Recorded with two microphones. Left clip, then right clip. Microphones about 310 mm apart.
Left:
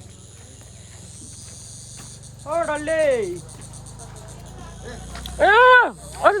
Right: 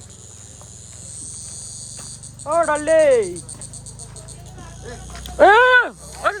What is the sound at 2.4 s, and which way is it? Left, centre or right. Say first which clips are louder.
Speech: right 5 dB; right.